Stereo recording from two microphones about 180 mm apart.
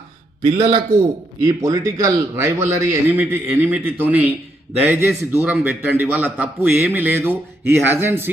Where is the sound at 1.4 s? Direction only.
20° right (ahead or behind).